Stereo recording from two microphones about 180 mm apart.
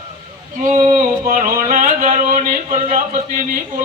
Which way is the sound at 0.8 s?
45° right (ahead or behind).